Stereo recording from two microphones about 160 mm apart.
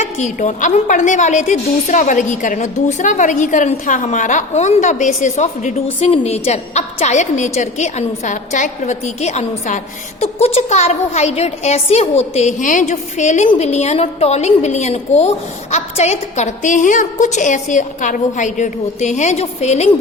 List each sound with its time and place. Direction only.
0.0 s a woman's voice: 50° left (ahead or behind)